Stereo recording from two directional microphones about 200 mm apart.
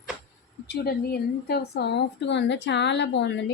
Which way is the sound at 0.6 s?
55° left (ahead or behind).